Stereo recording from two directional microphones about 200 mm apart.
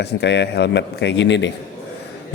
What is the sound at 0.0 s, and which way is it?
Speech, 55° left (ahead or behind).